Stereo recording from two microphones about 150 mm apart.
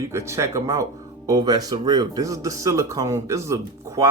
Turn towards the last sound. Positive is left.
turn(degrees=-20)  # may be behind; listen again after turning